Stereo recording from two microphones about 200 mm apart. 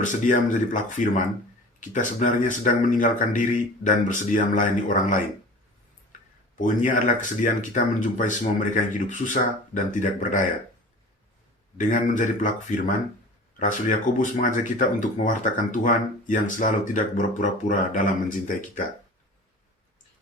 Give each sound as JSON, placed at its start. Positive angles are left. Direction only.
{"t": 0.0, "sound": "speech", "side_deg": 40}
{"t": 6.6, "sound": "speech", "side_deg": 40}
{"t": 11.8, "sound": "speech", "side_deg": 40}